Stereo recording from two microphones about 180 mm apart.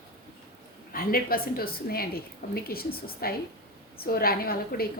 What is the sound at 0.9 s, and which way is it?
A woman's voice, 55° left (ahead or behind).